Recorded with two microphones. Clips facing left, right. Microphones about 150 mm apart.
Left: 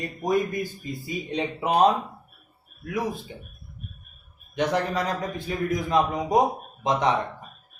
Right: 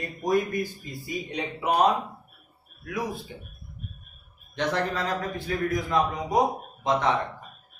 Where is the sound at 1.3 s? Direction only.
30° left (ahead or behind).